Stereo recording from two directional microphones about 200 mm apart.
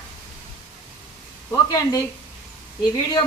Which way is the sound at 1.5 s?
15° left (ahead or behind).